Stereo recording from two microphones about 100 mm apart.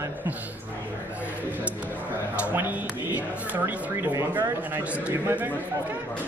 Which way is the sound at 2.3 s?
15° right (ahead or behind).